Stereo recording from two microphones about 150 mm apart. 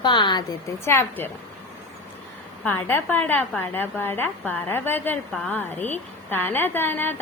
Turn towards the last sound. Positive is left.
turn(degrees=15)  # may be behind; listen again after turning